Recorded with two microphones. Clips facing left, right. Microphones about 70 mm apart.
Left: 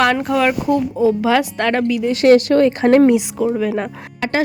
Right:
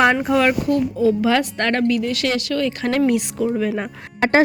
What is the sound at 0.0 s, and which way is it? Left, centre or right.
Speech, centre.